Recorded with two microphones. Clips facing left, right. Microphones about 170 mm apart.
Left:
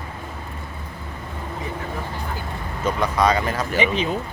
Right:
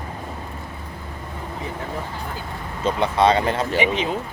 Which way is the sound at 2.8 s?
25° right (ahead or behind).